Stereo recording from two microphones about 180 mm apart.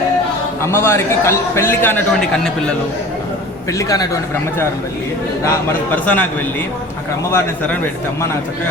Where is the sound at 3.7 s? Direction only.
20° left (ahead or behind).